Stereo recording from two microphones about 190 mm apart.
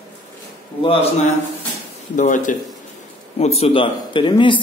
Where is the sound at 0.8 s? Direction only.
30° left (ahead or behind).